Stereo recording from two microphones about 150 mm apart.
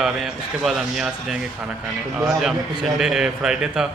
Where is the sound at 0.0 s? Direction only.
Centre (ahead or behind).